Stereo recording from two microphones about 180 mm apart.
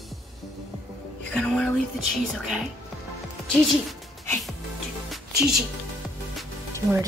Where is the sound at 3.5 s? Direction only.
Centre (ahead or behind).